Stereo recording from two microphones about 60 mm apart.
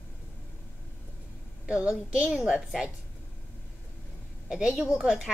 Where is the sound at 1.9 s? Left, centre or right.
Centre.